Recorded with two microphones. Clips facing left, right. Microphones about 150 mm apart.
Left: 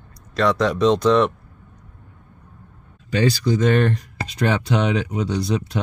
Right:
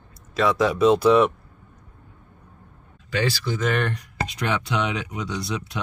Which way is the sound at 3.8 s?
35° left (ahead or behind).